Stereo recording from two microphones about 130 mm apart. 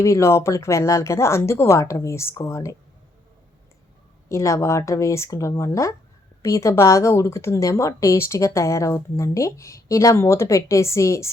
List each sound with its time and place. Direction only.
0.0 s a woman's voice: 20° left (ahead or behind)
4.3 s a woman's voice: 25° left (ahead or behind)